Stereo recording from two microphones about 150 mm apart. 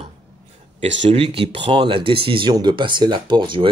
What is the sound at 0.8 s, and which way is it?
Speech, 40° right (ahead or behind).